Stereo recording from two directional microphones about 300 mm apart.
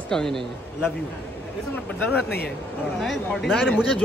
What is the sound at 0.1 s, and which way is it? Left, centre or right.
Speech, centre.